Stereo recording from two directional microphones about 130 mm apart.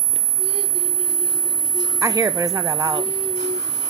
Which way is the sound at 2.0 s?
25° right (ahead or behind).